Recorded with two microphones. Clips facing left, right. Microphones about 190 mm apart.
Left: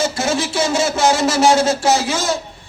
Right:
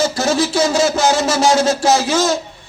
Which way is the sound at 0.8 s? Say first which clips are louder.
Left 1 dB; 30° left (ahead or behind).